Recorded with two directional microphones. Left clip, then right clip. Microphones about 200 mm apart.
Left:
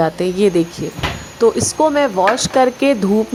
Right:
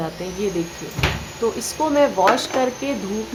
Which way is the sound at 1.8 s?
35° left (ahead or behind).